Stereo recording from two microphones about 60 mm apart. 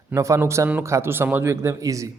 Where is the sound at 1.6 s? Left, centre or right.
Right.